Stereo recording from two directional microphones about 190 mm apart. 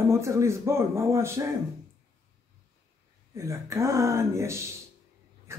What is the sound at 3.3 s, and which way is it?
A man's voice, 15° right (ahead or behind).